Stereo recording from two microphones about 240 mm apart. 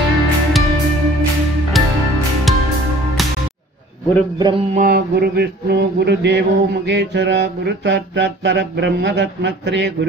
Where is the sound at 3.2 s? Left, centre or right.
Centre.